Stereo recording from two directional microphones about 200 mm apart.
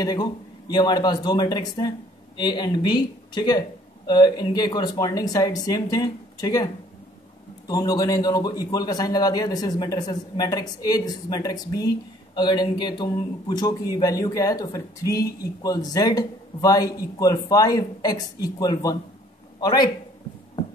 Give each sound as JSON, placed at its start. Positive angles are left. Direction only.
{"t": 0.0, "sound": "speech", "side_deg": 20}